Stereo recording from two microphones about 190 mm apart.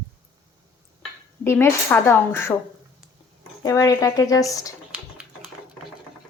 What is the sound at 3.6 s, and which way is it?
Cutlery, 15° left (ahead or behind).